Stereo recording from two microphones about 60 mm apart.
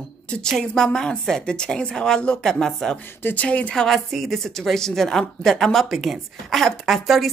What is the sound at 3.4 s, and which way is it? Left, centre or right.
Speech, centre.